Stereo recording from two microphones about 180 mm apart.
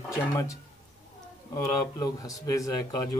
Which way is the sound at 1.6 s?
20° left (ahead or behind).